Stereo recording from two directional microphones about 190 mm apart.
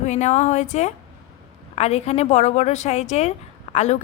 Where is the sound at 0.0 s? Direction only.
40° left (ahead or behind).